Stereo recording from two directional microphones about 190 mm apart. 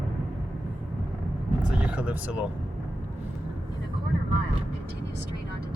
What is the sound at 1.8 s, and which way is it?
Speech, 5° right (ahead or behind).